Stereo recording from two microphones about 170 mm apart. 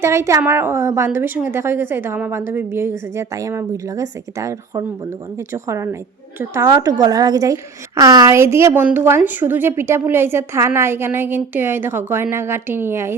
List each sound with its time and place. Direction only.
0.0 s a woman's voice: 15° right (ahead or behind)